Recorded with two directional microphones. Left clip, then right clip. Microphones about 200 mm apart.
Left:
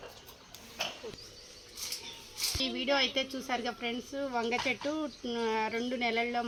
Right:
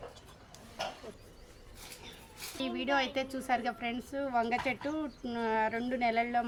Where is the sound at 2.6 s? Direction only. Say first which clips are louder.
Left 1 dB; 10° right (ahead or behind).